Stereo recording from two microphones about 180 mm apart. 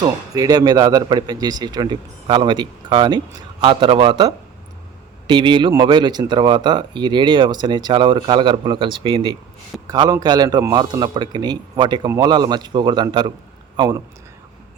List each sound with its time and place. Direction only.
0.0 s speech: 20° right (ahead or behind)
5.3 s speech: 25° right (ahead or behind)